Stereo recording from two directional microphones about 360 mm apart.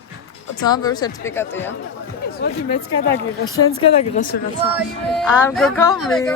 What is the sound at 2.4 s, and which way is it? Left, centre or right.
Speech, left.